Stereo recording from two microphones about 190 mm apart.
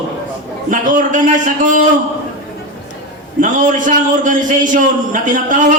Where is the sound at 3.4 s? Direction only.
45° right (ahead or behind).